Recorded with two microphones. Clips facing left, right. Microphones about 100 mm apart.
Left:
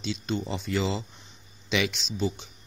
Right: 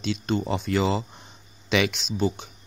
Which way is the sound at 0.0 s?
55° right (ahead or behind).